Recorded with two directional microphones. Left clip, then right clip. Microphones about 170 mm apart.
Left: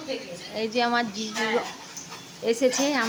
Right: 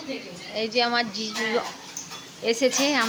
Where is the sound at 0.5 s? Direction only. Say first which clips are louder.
Right 1 dB; 5° left (ahead or behind).